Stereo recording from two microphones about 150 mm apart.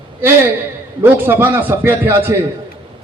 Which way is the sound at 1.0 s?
15° right (ahead or behind).